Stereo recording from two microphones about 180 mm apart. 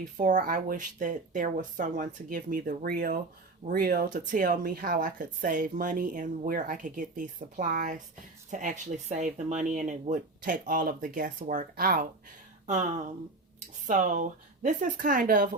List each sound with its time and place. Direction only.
0.0 s speech: 45° right (ahead or behind)
12.6 s speech: 40° right (ahead or behind)